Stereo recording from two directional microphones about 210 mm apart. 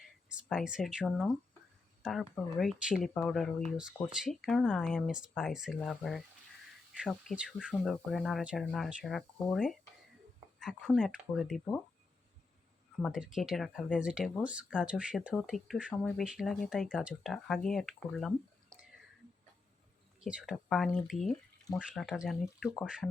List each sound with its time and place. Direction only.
0.3 s speech: 5° right (ahead or behind)
13.0 s speech: centre (ahead or behind)
20.2 s speech: 5° right (ahead or behind)